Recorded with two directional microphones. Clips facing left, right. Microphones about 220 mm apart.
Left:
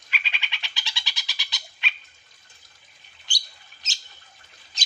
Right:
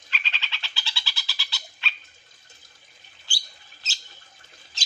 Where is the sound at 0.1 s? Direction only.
10° left (ahead or behind).